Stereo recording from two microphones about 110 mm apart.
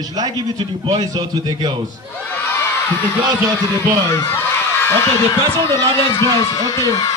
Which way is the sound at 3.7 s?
25° left (ahead or behind).